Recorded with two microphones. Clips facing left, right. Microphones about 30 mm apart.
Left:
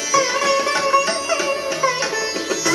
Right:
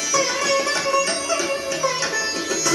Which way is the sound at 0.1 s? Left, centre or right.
Centre.